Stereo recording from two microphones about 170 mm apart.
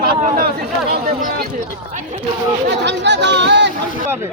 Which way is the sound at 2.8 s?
90° right.